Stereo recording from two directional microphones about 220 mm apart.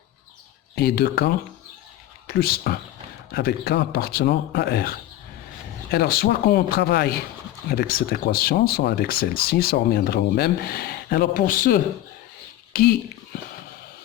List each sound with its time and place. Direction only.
0.8 s speech: 45° left (ahead or behind)